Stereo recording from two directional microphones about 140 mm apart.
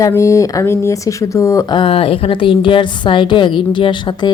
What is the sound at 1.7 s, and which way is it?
A woman's voice, 40° left (ahead or behind).